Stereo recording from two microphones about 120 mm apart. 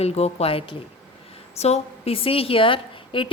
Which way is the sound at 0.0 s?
60° left (ahead or behind).